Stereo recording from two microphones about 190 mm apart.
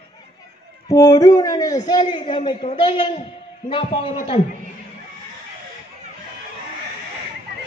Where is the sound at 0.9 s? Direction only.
20° left (ahead or behind).